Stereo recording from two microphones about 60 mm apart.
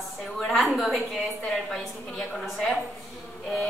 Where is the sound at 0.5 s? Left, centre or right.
Centre.